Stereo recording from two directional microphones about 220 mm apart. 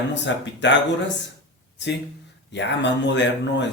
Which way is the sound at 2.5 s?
50° left (ahead or behind).